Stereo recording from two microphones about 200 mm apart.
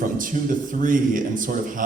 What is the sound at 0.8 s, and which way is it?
Speech, 40° right (ahead or behind).